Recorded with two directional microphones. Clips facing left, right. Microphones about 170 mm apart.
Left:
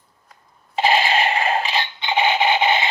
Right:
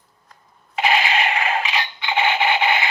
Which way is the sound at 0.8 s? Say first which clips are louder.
Left 2 dB; 30° left (ahead or behind).